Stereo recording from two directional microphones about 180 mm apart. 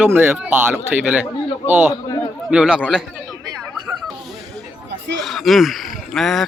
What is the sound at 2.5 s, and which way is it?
Speech, 5° right (ahead or behind).